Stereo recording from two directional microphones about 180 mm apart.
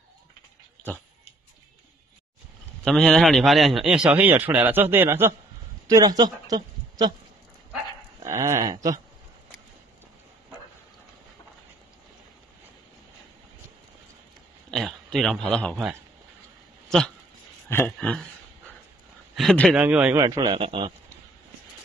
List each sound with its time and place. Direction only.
2.8 s a man's voice: 5° left (ahead or behind); by 7.2 s 20° right (ahead or behind)
8.2 s speech: 15° right (ahead or behind)
14.7 s a man's voice: centre (ahead or behind)
17.6 s a man's voice: 10° left (ahead or behind)
19.3 s speech: 5° left (ahead or behind)
19.7 s a man's voice: 5° right (ahead or behind)
20.2 s speech: 20° right (ahead or behind)